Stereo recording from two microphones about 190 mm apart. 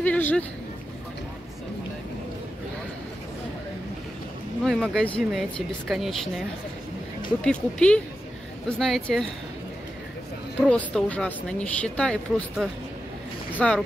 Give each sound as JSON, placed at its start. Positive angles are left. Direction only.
{"t": 0.0, "sound": "speech", "side_deg": 10}
{"t": 4.6, "sound": "speech", "side_deg": 0}
{"t": 7.4, "sound": "speech", "side_deg": 5}
{"t": 10.6, "sound": "speech", "side_deg": 5}